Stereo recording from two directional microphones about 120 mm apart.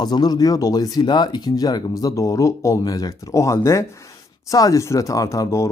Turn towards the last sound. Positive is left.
turn(degrees=25)  # may be behind; listen again after turning